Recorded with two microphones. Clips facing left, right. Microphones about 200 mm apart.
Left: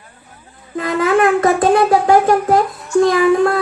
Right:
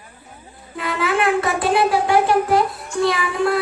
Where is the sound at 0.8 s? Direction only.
40° left (ahead or behind).